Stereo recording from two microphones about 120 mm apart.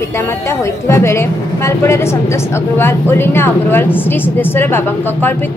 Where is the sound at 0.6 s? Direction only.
25° left (ahead or behind).